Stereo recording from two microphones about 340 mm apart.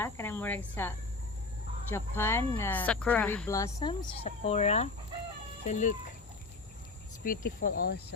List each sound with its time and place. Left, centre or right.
0.0 s speech: centre; by 6.0 s left
7.3 s speech: left